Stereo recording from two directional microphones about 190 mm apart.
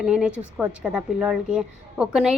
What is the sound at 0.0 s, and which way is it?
A woman's voice, 5° right (ahead or behind).